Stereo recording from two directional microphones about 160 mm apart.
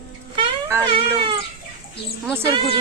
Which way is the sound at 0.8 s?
35° right (ahead or behind).